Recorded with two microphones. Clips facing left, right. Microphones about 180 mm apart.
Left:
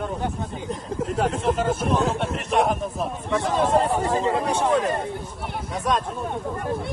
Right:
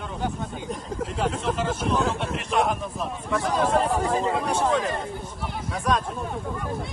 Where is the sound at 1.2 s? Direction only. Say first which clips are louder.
Left 3 dB; 50° left (ahead or behind).